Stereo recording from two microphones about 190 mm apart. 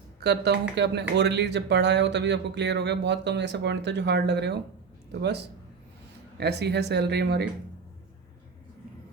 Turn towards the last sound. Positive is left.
turn(degrees=-60)  # may be behind; listen again after turning